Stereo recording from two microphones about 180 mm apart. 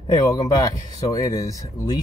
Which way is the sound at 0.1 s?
20° left (ahead or behind).